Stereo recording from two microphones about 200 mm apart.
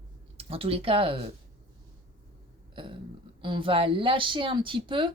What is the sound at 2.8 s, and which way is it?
A woman's voice, 25° right (ahead or behind).